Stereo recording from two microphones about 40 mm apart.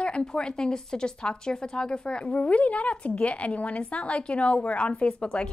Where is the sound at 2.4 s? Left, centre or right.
Left.